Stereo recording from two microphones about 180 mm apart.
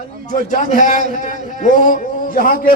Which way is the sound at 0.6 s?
45° left (ahead or behind).